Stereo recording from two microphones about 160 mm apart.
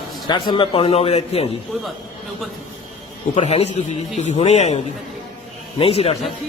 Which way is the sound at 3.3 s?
40° left (ahead or behind).